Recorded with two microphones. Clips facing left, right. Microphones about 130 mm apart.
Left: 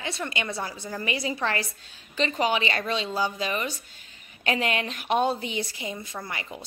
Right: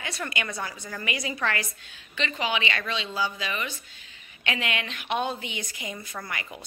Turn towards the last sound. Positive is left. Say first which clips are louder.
# left 1 dB
turn(degrees=25)  # may be behind; listen again after turning